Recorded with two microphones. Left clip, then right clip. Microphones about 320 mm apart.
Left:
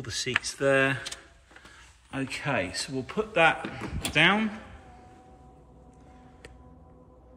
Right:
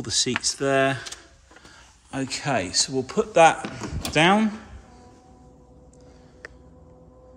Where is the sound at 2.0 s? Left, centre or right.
Centre.